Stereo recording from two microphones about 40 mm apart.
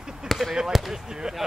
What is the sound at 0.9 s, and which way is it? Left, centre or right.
Speech, centre.